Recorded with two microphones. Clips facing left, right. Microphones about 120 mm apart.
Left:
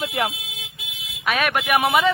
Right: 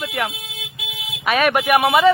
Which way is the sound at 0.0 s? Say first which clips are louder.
Even; 30° left (ahead or behind).